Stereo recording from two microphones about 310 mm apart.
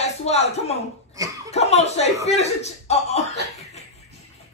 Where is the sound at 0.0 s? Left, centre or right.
Left.